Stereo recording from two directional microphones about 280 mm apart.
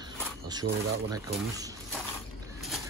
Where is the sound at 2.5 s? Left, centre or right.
Centre.